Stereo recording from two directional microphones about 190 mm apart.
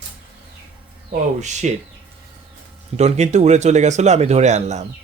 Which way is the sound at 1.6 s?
40° right (ahead or behind).